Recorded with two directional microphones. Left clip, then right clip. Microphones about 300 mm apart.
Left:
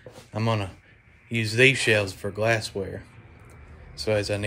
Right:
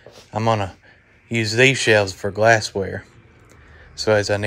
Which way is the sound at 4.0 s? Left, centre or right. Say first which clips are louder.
Right 8 dB; right.